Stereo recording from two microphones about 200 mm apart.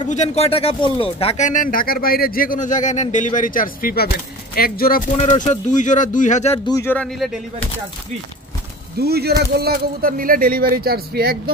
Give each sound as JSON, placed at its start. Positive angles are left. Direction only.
{"t": 0.1, "sound": "speech", "side_deg": 35}
{"t": 5.1, "sound": "speech", "side_deg": 35}
{"t": 6.7, "sound": "speech", "side_deg": 10}
{"t": 9.0, "sound": "speech", "side_deg": -55}